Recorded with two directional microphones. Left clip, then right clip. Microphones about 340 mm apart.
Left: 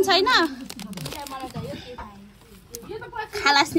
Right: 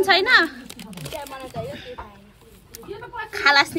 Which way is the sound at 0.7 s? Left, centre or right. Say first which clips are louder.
Even; centre.